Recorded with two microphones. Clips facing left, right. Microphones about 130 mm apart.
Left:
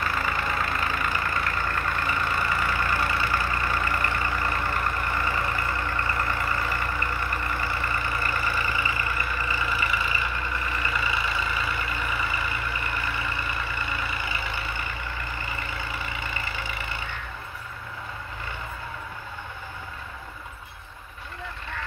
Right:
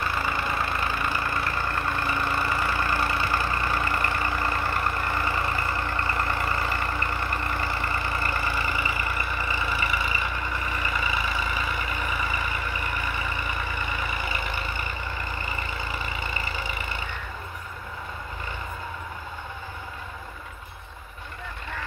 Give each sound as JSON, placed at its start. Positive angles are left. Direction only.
{"t": 0.0, "sound": "vehicle", "side_deg": -25}
{"t": 8.5, "sound": "vehicle", "side_deg": -15}